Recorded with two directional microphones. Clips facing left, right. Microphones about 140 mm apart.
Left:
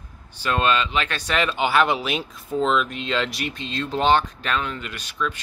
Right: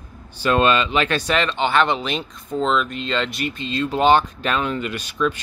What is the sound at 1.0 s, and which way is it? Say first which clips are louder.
Speech: right 4 dB; centre (ahead or behind).